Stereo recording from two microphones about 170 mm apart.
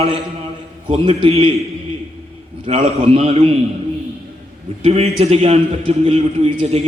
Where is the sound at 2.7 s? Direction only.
40° right (ahead or behind).